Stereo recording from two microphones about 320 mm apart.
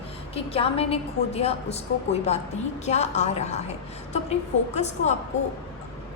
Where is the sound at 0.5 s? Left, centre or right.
Centre.